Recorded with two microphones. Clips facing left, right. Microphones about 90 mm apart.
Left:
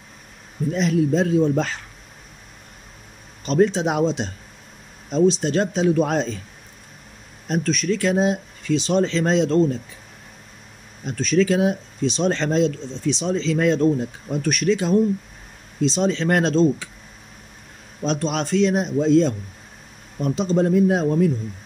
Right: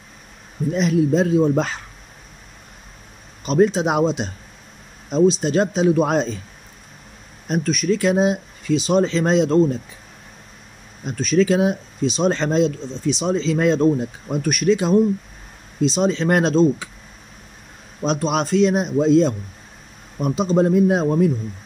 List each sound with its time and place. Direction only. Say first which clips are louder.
0.7 s speech: right 2 dB; 15° right (ahead or behind)
3.4 s speech: right 2 dB; 15° right (ahead or behind)
5.4 s speech: right 2 dB; 15° right (ahead or behind)
7.4 s speech: right 2 dB; 15° right (ahead or behind)
11.1 s speech: right 2 dB; 15° right (ahead or behind)
18.0 s speech: right 3 dB; 15° right (ahead or behind)